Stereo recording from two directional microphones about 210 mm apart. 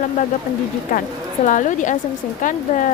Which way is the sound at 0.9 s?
40° left (ahead or behind).